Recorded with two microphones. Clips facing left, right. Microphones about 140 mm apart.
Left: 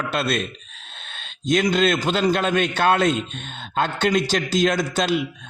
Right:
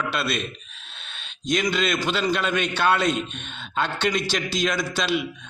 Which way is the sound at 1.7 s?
40° left (ahead or behind).